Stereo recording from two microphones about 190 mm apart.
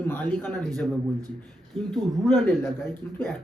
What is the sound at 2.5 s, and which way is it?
Speech, 10° left (ahead or behind).